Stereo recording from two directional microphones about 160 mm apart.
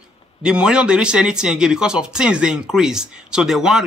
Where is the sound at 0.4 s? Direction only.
5° right (ahead or behind).